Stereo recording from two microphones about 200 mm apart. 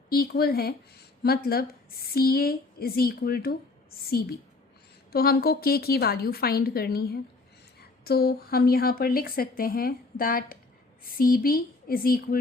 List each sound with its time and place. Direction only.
0.1 s speech: 50° left (ahead or behind)